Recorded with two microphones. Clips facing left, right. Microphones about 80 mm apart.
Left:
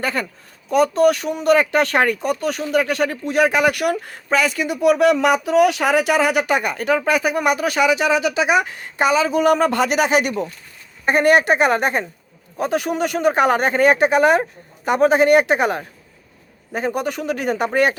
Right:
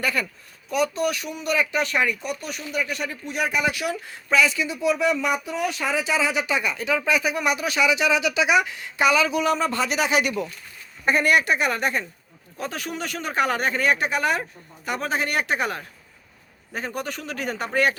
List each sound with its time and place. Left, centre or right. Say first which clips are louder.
0.0 s speech: left 3 dB; left
2.5 s speech: left 10 dB; left
2.7 s speech: left 8 dB; left
9.4 s speech: left 7 dB; left
11.0 s speech: left 5 dB; left